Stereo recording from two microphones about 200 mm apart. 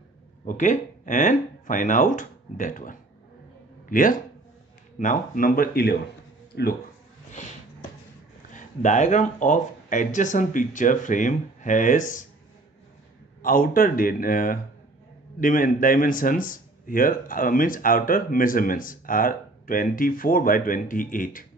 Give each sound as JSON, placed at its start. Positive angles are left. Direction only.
{"t": 0.5, "sound": "speech", "side_deg": 40}
{"t": 8.5, "sound": "speech", "side_deg": 35}
{"t": 13.4, "sound": "speech", "side_deg": 45}